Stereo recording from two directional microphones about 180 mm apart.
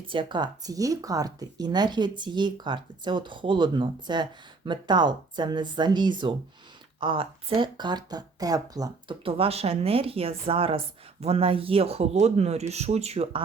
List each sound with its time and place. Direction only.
0.1 s speech: 25° right (ahead or behind)